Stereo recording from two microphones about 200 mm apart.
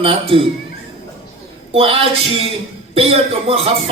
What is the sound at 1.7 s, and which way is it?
Speech, 30° right (ahead or behind).